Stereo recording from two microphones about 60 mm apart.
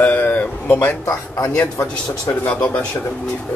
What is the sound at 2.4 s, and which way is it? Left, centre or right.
Speech, left.